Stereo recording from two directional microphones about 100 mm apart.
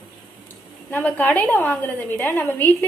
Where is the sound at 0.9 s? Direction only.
15° left (ahead or behind).